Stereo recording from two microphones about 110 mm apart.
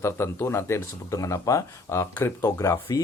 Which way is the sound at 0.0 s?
25° left (ahead or behind).